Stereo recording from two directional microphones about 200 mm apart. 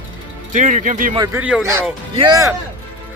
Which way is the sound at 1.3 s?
10° right (ahead or behind).